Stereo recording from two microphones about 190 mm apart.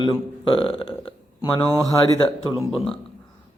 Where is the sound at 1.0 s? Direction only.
25° left (ahead or behind).